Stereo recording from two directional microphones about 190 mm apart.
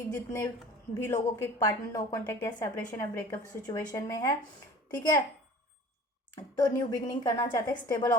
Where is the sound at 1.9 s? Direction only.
15° left (ahead or behind).